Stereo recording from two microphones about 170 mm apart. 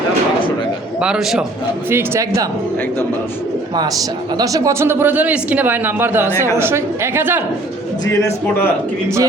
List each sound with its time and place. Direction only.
1.0 s a man's voice: 5° right (ahead or behind)
1.9 s a man's voice: 15° right (ahead or behind)
4.4 s a man's voice: 20° right (ahead or behind)
8.0 s a man's voice: 20° left (ahead or behind)